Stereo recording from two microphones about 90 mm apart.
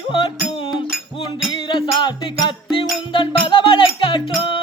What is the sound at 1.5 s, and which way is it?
Music, 65° left (ahead or behind).